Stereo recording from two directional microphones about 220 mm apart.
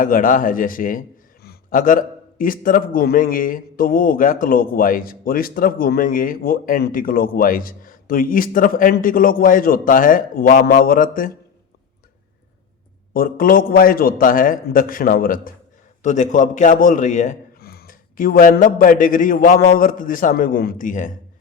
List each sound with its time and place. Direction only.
0.0 s a man's voice: 40° left (ahead or behind)
13.1 s a man's voice: 40° left (ahead or behind)